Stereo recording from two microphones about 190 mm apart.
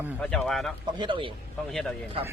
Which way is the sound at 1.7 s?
5° left (ahead or behind).